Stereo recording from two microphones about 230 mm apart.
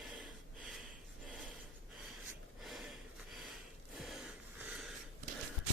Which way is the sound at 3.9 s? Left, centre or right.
Centre.